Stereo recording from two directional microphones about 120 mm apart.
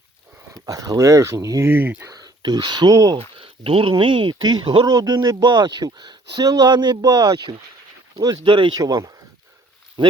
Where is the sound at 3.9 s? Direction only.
45° right (ahead or behind).